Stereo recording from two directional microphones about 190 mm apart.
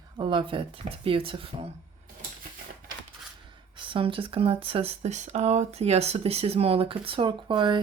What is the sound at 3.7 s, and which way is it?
Speech, 25° right (ahead or behind).